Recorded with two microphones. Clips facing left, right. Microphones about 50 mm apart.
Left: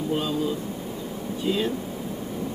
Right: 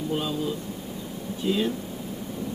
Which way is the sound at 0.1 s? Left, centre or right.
Centre.